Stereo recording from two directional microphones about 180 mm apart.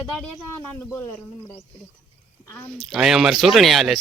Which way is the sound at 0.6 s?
10° left (ahead or behind).